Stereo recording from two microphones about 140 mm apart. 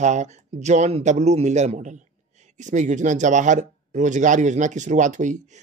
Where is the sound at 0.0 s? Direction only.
55° right (ahead or behind).